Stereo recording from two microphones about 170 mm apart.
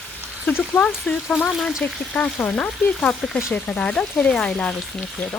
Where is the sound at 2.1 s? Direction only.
10° left (ahead or behind).